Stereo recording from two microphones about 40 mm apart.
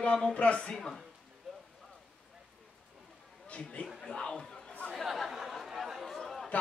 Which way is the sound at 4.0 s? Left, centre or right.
Centre.